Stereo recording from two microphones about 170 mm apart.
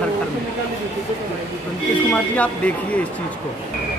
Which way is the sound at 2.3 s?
10° left (ahead or behind).